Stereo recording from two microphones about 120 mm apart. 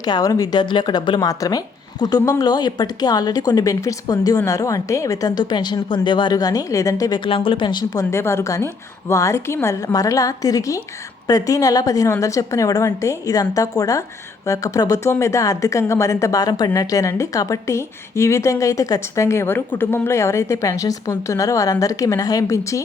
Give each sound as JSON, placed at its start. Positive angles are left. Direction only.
{"t": 0.0, "sound": "a woman's voice", "side_deg": 30}
{"t": 7.3, "sound": "speech", "side_deg": 50}
{"t": 8.1, "sound": "a woman's voice", "side_deg": 20}